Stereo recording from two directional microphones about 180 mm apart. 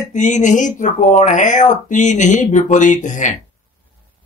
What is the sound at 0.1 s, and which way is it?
Speech, 45° left (ahead or behind).